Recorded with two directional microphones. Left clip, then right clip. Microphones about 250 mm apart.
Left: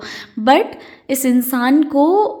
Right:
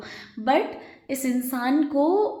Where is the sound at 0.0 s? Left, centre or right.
Left.